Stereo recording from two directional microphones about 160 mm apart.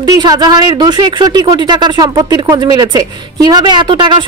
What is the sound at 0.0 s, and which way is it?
A woman's voice, 25° right (ahead or behind).